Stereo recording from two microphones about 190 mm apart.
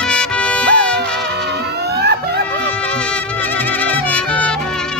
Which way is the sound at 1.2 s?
60° right (ahead or behind).